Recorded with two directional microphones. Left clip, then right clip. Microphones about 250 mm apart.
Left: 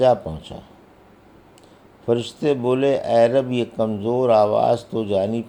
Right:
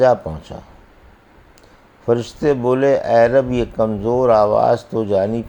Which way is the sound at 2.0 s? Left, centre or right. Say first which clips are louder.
Right 3 dB; right.